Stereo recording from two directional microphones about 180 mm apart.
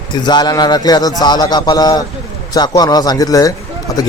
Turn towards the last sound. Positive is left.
turn(degrees=20)  # may be behind; listen again after turning